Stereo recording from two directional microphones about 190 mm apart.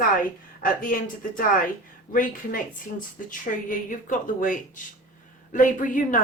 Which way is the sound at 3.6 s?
45° left (ahead or behind).